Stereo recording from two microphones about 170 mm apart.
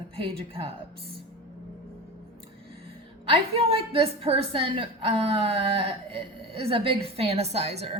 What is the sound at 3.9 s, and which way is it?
A woman's voice, 35° right (ahead or behind).